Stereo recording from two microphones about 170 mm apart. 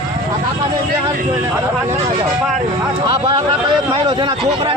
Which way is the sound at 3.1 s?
30° right (ahead or behind).